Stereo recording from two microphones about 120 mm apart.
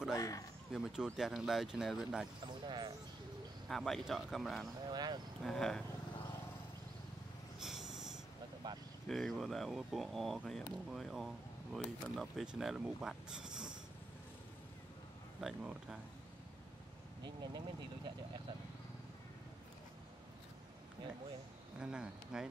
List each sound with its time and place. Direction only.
0.1 s speech: 25° left (ahead or behind)
0.7 s speech: 5° right (ahead or behind)
2.4 s speech: 35° right (ahead or behind)
3.6 s speech: centre (ahead or behind)
4.8 s speech: 35° right (ahead or behind)
5.4 s speech: 5° left (ahead or behind)
7.6 s wheeze: 5° right (ahead or behind)
8.6 s vehicle: 35° right (ahead or behind)
9.1 s speech: centre (ahead or behind)
15.4 s speech: 5° right (ahead or behind)
17.2 s speech: 35° right (ahead or behind)
21.7 s speech: 5° right (ahead or behind)